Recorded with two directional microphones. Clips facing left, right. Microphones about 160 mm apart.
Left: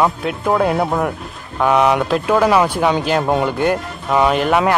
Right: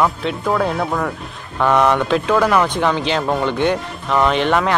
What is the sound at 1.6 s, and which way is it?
Speech, 5° left (ahead or behind).